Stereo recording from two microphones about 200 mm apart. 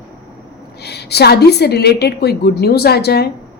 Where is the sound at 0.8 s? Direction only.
55° left (ahead or behind).